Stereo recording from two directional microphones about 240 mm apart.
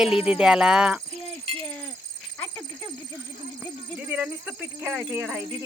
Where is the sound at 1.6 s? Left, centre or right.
Centre.